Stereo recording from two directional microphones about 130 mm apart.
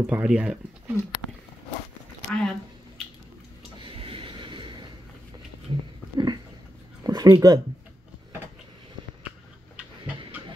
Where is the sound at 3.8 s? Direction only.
45° right (ahead or behind).